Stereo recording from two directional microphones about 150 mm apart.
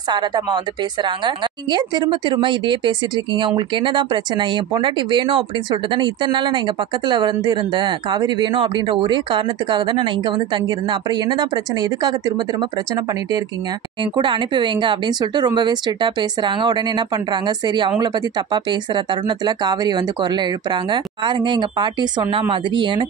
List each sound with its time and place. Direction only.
0.1 s speech: 30° right (ahead or behind)